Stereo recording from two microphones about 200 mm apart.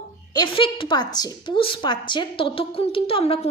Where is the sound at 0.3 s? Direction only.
25° left (ahead or behind).